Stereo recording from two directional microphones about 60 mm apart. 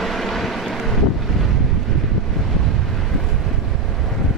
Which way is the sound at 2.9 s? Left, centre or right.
Centre.